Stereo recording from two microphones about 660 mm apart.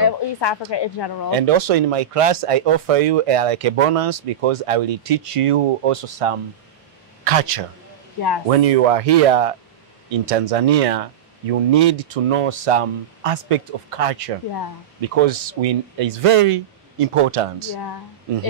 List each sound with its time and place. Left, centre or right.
0.0 s a sound: left
0.7 s a woman's voice: left
1.3 s speech: right
17.7 s a woman's voice: left